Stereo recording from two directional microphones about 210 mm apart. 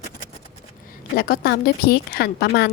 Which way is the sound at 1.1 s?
45° left (ahead or behind).